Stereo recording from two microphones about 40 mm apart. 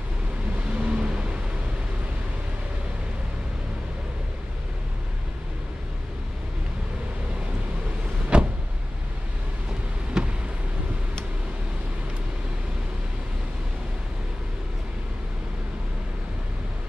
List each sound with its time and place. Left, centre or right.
0.7 s vehicle: right
8.3 s vehicle: right
10.2 s a sound: centre